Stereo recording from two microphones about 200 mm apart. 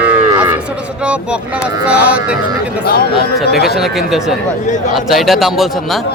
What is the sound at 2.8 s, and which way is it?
Speech, 50° left (ahead or behind).